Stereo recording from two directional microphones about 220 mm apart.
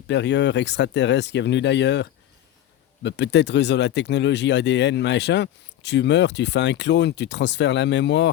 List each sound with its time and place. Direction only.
0.1 s speech: 55° left (ahead or behind)